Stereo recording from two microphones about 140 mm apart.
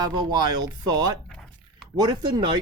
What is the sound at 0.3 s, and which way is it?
Speech, 30° right (ahead or behind).